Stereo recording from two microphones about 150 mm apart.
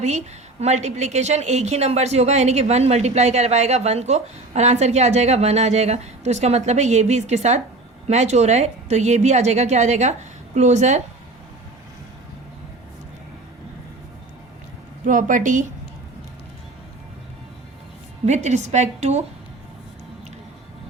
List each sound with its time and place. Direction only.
0.6 s a woman's voice: 50° right (ahead or behind)
15.0 s a woman's voice: 60° right (ahead or behind)
18.3 s a woman's voice: 50° right (ahead or behind)